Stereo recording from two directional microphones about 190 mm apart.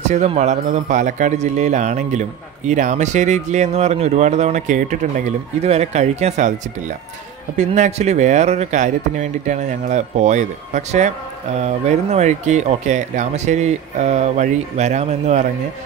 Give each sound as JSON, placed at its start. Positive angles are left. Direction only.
{"t": 0.0, "sound": "speech", "side_deg": -35}
{"t": 7.5, "sound": "speech", "side_deg": -40}